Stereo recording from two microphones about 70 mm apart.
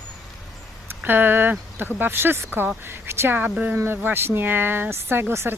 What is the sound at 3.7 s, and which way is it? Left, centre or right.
Speech, right.